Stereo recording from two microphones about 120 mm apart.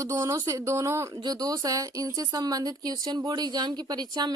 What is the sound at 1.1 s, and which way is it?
Speech, 35° right (ahead or behind).